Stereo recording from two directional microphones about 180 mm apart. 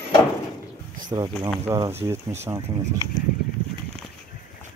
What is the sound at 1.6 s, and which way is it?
Speech, 15° right (ahead or behind).